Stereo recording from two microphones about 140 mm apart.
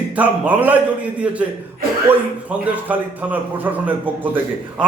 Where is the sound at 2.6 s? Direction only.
10° right (ahead or behind).